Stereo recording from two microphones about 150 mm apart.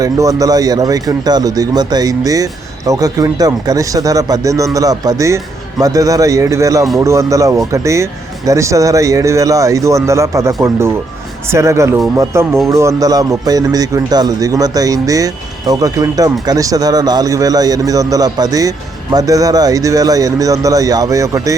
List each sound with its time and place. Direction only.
0.0 s speech: 25° right (ahead or behind)